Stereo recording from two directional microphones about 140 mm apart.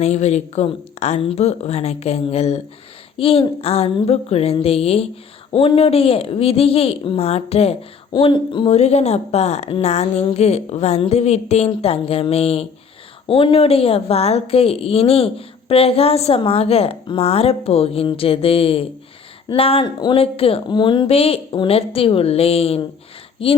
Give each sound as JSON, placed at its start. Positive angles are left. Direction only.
{"t": 0.0, "sound": "a woman's voice", "side_deg": 50}
{"t": 8.1, "sound": "a woman's voice", "side_deg": 35}